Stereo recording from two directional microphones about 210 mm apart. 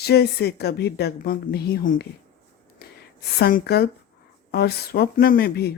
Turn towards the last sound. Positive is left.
turn(degrees=50)  # may be behind; listen again after turning